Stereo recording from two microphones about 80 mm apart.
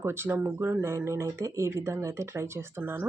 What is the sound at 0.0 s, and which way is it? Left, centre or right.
Speech, right.